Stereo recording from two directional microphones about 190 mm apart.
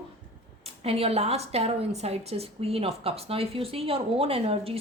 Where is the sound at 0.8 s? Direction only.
30° right (ahead or behind).